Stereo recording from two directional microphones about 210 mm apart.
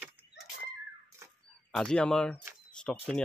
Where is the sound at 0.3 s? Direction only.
55° left (ahead or behind).